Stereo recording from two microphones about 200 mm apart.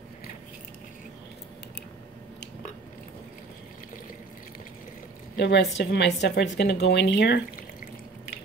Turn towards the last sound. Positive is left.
turn(degrees=55)  # may be behind; listen again after turning